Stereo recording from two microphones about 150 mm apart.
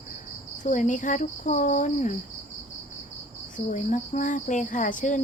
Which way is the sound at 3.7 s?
60° left (ahead or behind).